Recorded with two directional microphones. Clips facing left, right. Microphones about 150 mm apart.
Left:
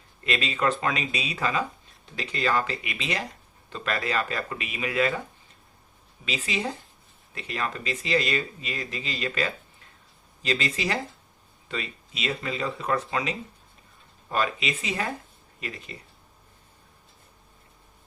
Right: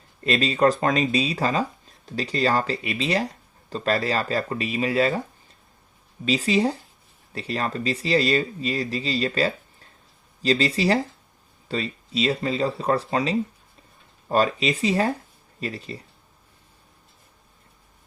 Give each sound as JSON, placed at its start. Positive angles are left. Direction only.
{"t": 0.3, "sound": "speech", "side_deg": -35}
{"t": 6.2, "sound": "speech", "side_deg": -35}